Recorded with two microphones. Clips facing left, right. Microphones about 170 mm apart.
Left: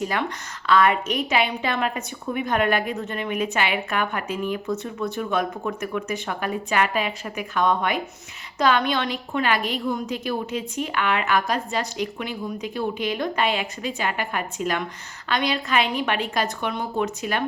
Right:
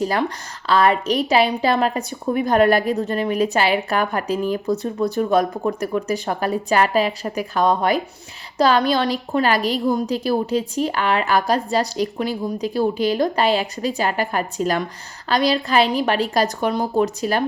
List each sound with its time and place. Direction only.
0.0 s a woman's voice: 35° right (ahead or behind)